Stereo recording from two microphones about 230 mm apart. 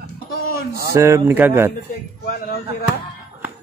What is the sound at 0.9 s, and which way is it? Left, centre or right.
Speech, centre.